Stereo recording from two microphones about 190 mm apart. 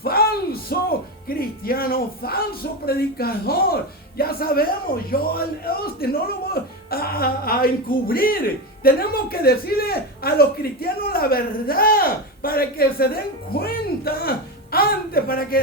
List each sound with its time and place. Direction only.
0.0 s music: 55° left (ahead or behind)
1.4 s speech: 50° left (ahead or behind)